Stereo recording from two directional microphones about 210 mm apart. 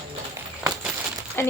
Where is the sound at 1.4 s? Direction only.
10° left (ahead or behind).